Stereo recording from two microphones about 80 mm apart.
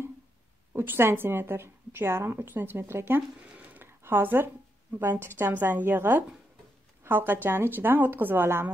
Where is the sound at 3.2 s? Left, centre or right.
Centre.